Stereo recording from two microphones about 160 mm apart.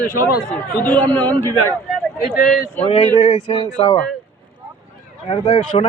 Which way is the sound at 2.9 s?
40° left (ahead or behind).